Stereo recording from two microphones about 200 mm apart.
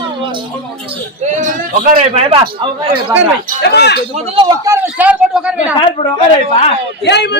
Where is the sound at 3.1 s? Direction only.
40° right (ahead or behind).